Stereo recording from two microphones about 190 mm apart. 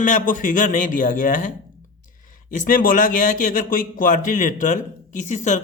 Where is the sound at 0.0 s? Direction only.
45° left (ahead or behind).